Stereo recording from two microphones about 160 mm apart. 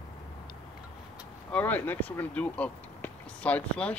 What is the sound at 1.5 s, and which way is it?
Speech, 10° left (ahead or behind).